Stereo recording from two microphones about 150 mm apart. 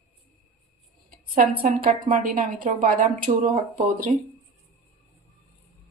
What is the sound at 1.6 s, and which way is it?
A woman's voice, 60° right (ahead or behind).